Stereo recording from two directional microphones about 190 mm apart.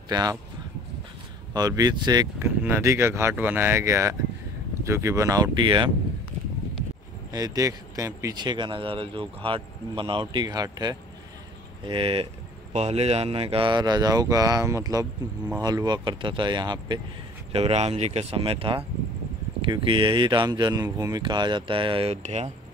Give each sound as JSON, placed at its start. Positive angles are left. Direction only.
{"t": 0.1, "sound": "speech", "side_deg": -20}
{"t": 1.5, "sound": "speech", "side_deg": -20}
{"t": 7.3, "sound": "speech", "side_deg": -20}